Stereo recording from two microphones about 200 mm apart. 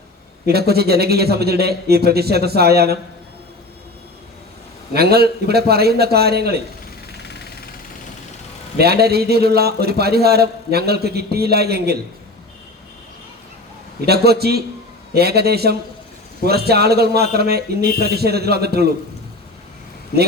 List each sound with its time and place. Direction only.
0.4 s a man's voice: 50° right (ahead or behind)
4.9 s a man's voice: 50° right (ahead or behind)
8.8 s a man's voice: 50° right (ahead or behind)
14.0 s a man's voice: 50° right (ahead or behind)